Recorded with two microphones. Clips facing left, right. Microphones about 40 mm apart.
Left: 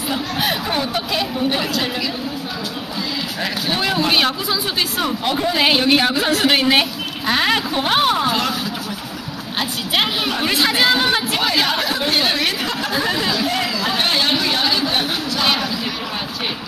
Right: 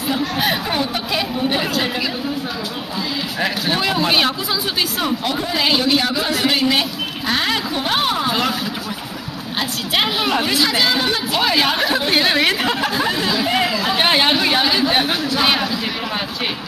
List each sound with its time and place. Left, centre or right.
0.1 s speech: centre
3.3 s speech: centre
3.7 s speech: centre
5.6 s a woman's voice: left
7.4 s speech: centre
10.7 s speech: centre
11.4 s speech: centre
12.9 s speech: centre
13.5 s speech: centre